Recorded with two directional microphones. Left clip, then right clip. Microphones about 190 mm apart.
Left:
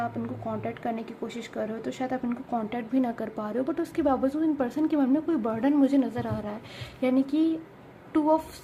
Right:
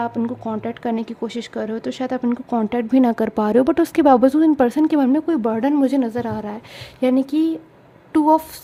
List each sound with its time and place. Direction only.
0.0 s speech: 45° right (ahead or behind)